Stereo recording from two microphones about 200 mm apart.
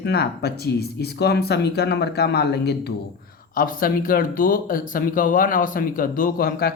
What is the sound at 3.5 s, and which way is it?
Speech, 45° left (ahead or behind).